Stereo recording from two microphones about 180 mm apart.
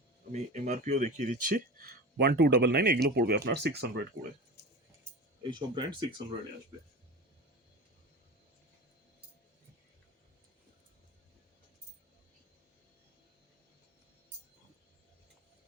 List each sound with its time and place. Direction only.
0.3 s speech: 40° right (ahead or behind); by 4.0 s 65° right (ahead or behind)
4.6 s a sound: 70° left (ahead or behind)
5.4 s speech: 25° right (ahead or behind)